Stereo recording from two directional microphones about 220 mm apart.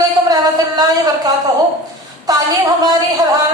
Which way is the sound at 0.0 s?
15° right (ahead or behind).